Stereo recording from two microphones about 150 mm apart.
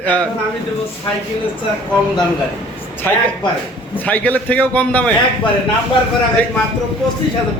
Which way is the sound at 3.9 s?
10° left (ahead or behind).